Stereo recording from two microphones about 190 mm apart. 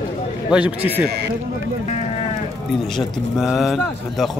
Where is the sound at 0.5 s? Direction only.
5° right (ahead or behind).